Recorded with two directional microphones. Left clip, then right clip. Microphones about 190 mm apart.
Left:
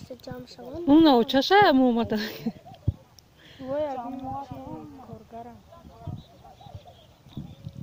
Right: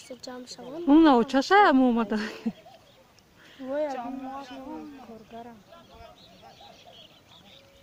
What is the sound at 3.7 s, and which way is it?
Speech, 10° right (ahead or behind).